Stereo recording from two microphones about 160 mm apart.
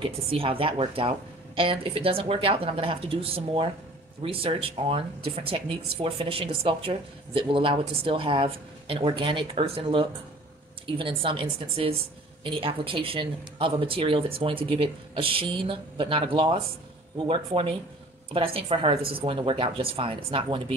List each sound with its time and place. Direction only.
0.0 s speech: 35° right (ahead or behind)